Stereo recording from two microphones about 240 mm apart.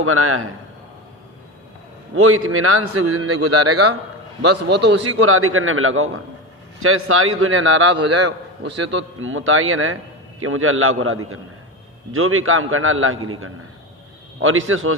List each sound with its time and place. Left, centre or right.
0.0 s a man's voice: right
2.1 s a man's voice: right
4.4 s a man's voice: right